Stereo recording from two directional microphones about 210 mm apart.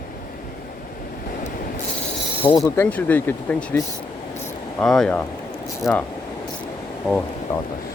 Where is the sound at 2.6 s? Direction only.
10° left (ahead or behind).